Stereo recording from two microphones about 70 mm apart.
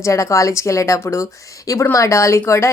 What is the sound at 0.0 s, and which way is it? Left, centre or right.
A woman's voice, left.